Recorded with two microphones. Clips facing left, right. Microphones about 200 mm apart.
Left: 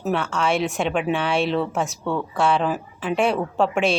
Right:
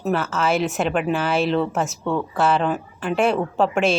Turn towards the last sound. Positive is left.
turn(degrees=0)  # may be behind; listen again after turning